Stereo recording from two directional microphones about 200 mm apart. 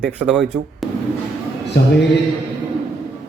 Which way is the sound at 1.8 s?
55° left (ahead or behind).